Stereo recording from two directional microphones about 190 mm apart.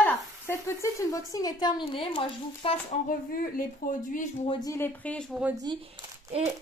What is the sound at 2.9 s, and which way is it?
Speech, 50° left (ahead or behind).